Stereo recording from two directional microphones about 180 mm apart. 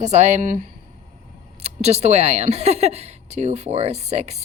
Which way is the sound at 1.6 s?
35° right (ahead or behind).